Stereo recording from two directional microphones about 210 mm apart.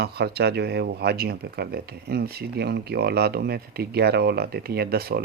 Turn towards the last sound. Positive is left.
turn(degrees=-50)  # may be behind; listen again after turning